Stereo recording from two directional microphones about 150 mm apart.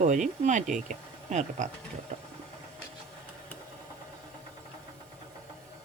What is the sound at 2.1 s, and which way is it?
Engine, 45° right (ahead or behind).